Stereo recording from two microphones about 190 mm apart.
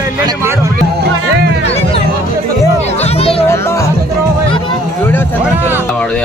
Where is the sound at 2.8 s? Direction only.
35° left (ahead or behind).